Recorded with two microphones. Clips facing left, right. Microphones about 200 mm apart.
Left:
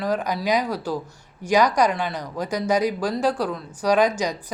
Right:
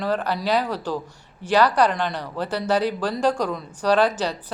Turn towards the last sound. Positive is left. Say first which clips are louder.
# even
turn(degrees=10)  # may be behind; listen again after turning